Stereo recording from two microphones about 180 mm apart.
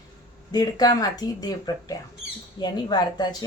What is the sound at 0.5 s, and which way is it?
A woman's voice, 20° left (ahead or behind).